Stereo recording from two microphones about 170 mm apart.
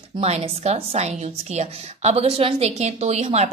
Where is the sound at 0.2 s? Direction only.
35° right (ahead or behind).